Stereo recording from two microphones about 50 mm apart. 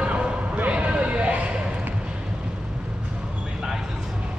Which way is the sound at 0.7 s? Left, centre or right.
Right.